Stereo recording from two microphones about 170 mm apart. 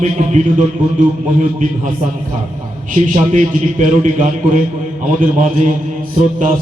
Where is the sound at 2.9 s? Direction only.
45° right (ahead or behind).